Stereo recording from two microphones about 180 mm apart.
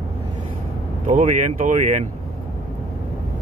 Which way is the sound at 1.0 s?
45° right (ahead or behind).